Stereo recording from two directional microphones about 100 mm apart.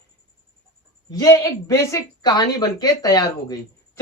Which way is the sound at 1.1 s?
35° left (ahead or behind).